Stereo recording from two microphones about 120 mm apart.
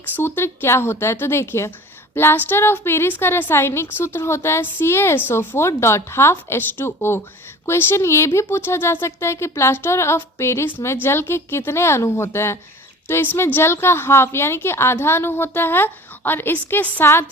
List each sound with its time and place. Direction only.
0.2 s a woman's voice: 20° left (ahead or behind)